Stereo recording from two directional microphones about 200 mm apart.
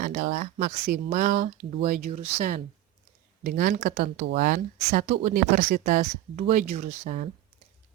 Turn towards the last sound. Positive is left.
turn(degrees=-40)  # may be behind; listen again after turning